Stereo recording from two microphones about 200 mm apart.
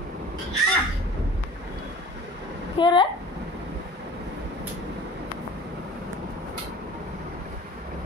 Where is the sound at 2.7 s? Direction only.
25° left (ahead or behind).